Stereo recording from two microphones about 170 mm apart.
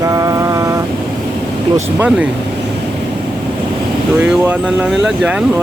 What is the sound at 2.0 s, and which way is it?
Speech, 5° right (ahead or behind).